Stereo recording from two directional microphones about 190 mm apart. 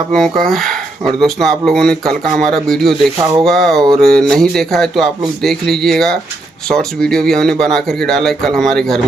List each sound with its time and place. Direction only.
0.1 s speech: centre (ahead or behind)
3.2 s speech: 15° right (ahead or behind)
3.4 s speech: centre (ahead or behind)